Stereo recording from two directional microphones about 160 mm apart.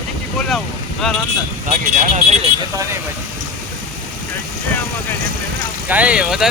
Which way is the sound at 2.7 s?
20° right (ahead or behind).